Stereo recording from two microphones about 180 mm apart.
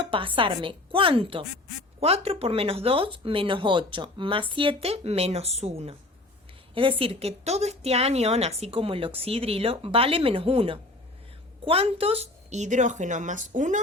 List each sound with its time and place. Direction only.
0.1 s a woman's voice: 30° right (ahead or behind); by 13.7 s 45° right (ahead or behind)